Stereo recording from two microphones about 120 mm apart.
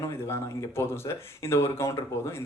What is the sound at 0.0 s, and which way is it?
Speech, 20° left (ahead or behind).